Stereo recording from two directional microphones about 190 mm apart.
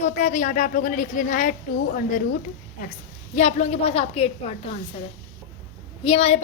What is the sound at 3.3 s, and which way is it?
A woman's voice, 35° left (ahead or behind).